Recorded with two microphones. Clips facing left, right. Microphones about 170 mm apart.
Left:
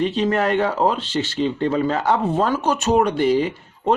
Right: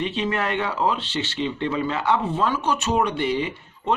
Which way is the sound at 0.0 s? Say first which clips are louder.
Left 6 dB; 40° left (ahead or behind).